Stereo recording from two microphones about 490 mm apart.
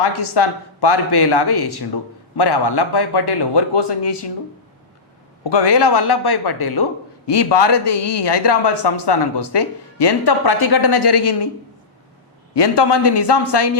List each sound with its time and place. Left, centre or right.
0.0 s speech: left
5.4 s speech: left
12.5 s speech: left